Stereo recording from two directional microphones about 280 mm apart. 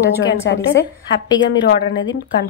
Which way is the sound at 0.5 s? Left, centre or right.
Left.